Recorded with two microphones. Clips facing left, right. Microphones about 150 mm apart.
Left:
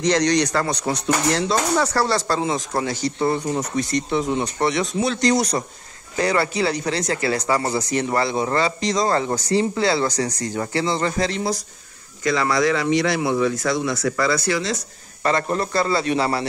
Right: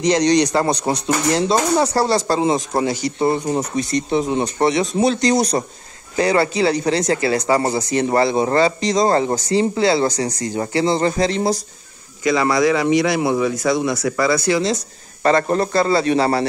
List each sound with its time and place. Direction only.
0.0 s speech: 20° right (ahead or behind); by 8.7 s 35° right (ahead or behind)
8.8 s speech: 25° right (ahead or behind)
12.3 s speech: 10° right (ahead or behind)
15.2 s speech: 35° right (ahead or behind)